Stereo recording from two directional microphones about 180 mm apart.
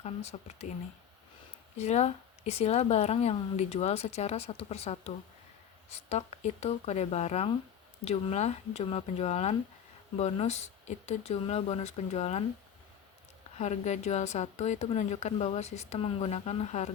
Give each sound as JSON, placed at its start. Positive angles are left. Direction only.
{"t": 0.0, "sound": "speech", "side_deg": 35}
{"t": 1.8, "sound": "speech", "side_deg": 40}
{"t": 13.6, "sound": "speech", "side_deg": 40}